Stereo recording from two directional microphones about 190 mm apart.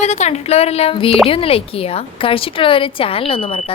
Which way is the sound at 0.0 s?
35° left (ahead or behind).